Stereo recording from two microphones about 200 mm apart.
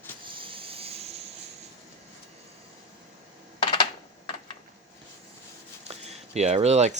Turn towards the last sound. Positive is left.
turn(degrees=-35)  # may be behind; listen again after turning